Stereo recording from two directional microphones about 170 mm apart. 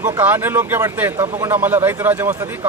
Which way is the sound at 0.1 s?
10° right (ahead or behind).